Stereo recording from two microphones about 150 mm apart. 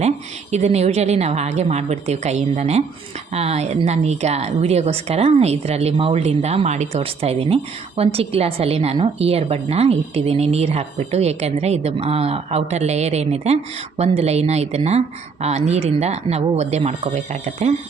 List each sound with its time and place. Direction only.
0.5 s a woman's voice: 45° right (ahead or behind)